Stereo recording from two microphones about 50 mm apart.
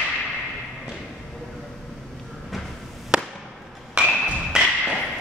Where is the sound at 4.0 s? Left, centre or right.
Centre.